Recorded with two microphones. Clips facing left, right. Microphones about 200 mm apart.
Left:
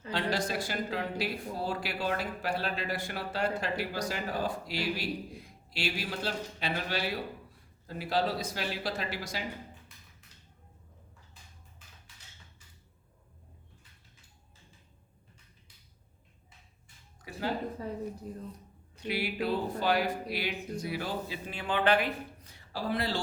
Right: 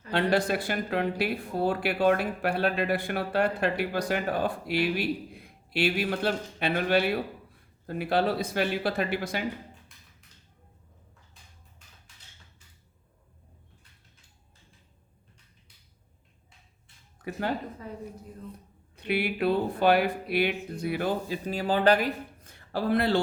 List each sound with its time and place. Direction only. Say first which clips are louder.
0.1 s speech: right 6 dB; 60° right (ahead or behind)
18.9 s speech: right 5 dB; 60° right (ahead or behind)
21.4 s speech: right 6 dB; 40° right (ahead or behind); by 23.2 s 55° right (ahead or behind)